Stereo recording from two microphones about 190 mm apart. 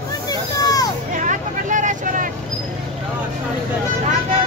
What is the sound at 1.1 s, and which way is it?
Vehicle, 45° right (ahead or behind).